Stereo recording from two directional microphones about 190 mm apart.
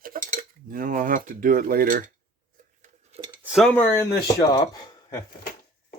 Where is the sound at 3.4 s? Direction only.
5° right (ahead or behind).